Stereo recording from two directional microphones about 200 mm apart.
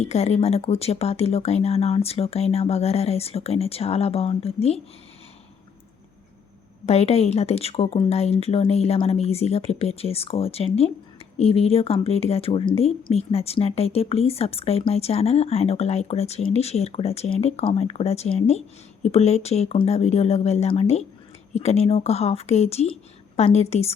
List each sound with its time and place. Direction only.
0.0 s speech: 30° left (ahead or behind)
6.8 s speech: 30° left (ahead or behind)